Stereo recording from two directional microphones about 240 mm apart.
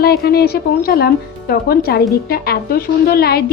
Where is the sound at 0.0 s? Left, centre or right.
Left.